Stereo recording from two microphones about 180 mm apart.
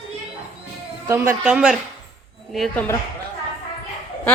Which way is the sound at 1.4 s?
5° right (ahead or behind).